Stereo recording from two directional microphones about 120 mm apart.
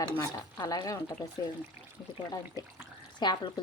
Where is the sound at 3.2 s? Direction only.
35° left (ahead or behind).